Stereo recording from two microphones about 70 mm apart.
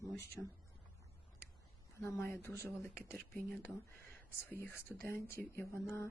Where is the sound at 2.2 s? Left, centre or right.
Left.